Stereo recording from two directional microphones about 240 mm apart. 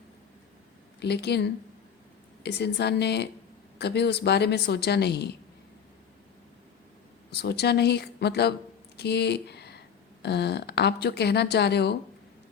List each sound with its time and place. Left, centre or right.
0.9 s speech: left
7.3 s speech: left